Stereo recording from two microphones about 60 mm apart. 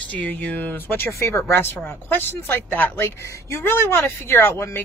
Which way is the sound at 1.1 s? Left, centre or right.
Left.